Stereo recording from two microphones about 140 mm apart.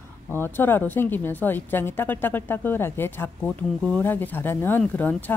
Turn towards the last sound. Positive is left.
turn(degrees=10)  # may be behind; listen again after turning